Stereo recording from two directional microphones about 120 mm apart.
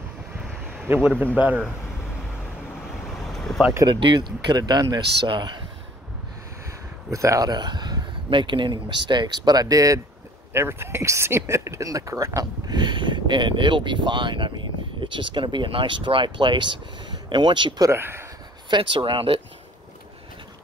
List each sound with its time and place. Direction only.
0.9 s speech: 20° right (ahead or behind)
3.3 s vehicle: 5° left (ahead or behind)
3.8 s speech: 40° right (ahead or behind)
7.1 s speech: 25° right (ahead or behind); by 17.8 s 40° right (ahead or behind)
17.8 s speech: 20° right (ahead or behind)
18.7 s speech: 45° right (ahead or behind)